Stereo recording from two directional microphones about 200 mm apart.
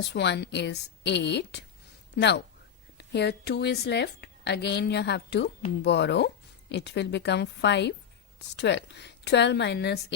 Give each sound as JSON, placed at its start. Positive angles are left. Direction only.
{"t": 0.1, "sound": "a woman's voice", "side_deg": 60}
{"t": 3.1, "sound": "a woman's voice", "side_deg": 55}